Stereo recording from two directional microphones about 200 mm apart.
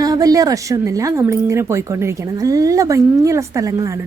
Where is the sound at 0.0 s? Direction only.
20° right (ahead or behind).